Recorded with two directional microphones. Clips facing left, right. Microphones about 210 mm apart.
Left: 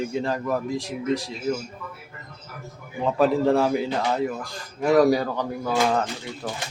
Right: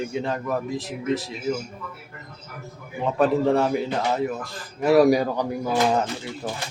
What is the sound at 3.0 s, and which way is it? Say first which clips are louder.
A man's voice: even; centre (ahead or behind).